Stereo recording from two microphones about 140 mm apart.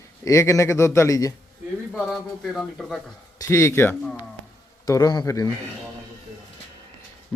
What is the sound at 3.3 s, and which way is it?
A man's voice, 20° left (ahead or behind).